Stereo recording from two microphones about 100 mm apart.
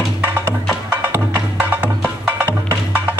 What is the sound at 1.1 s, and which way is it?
Music, 15° right (ahead or behind).